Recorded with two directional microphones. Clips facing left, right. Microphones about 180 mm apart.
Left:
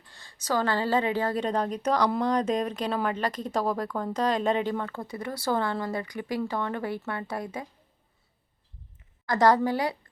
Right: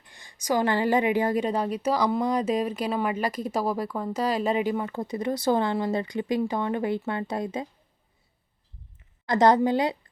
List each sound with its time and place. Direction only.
0.0 s a woman's voice: 15° right (ahead or behind)
9.2 s a woman's voice: 20° right (ahead or behind)